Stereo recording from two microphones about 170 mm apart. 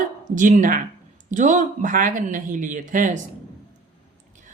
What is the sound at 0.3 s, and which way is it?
Speech, 50° right (ahead or behind).